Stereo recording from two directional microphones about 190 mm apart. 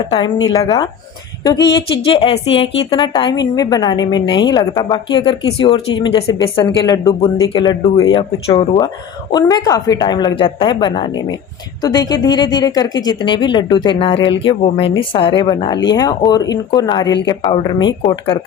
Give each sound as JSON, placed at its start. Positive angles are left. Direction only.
{"t": 0.1, "sound": "a woman's voice", "side_deg": 20}
{"t": 9.3, "sound": "a woman's voice", "side_deg": 20}